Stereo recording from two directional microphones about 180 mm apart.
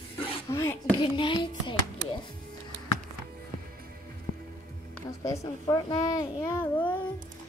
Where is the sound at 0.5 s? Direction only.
10° left (ahead or behind).